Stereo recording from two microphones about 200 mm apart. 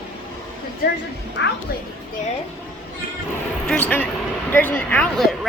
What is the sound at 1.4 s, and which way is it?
Speech, 60° left (ahead or behind).